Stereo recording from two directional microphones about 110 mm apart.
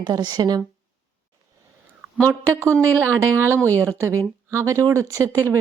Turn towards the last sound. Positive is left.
turn(degrees=-25)  # may be behind; listen again after turning